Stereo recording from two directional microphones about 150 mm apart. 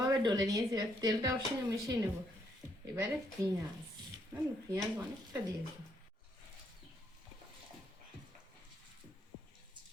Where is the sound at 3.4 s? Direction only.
20° right (ahead or behind).